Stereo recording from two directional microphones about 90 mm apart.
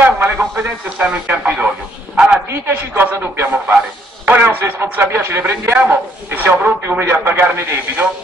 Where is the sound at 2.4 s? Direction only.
30° right (ahead or behind).